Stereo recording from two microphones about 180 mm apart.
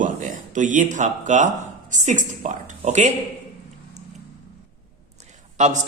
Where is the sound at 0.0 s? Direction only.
45° right (ahead or behind).